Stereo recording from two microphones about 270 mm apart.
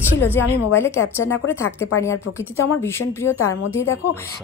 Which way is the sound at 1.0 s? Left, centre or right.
Left.